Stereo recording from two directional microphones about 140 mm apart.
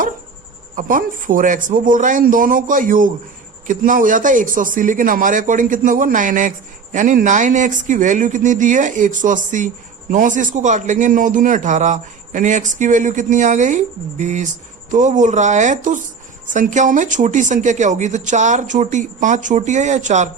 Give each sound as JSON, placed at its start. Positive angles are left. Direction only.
{"t": 0.8, "sound": "a man's voice", "side_deg": -75}